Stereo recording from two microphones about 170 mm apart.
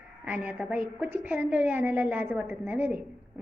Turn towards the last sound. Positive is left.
turn(degrees=-10)  # may be behind; listen again after turning